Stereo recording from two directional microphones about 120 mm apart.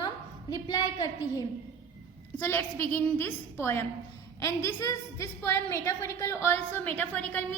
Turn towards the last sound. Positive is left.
turn(degrees=15)  # may be behind; listen again after turning